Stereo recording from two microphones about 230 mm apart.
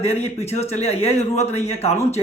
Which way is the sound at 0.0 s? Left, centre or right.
Left.